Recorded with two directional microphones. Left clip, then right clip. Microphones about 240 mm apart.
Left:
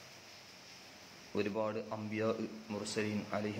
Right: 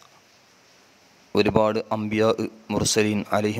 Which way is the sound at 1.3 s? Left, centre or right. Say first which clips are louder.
Right 16 dB; right.